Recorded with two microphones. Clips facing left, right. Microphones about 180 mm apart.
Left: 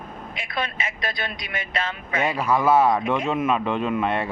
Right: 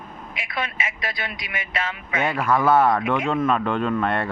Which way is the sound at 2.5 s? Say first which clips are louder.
Even; 5° left (ahead or behind).